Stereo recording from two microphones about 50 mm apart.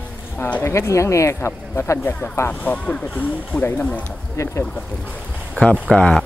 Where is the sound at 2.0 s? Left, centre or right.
Left.